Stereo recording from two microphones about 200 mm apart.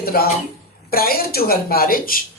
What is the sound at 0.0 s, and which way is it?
A woman's voice, 50° left (ahead or behind).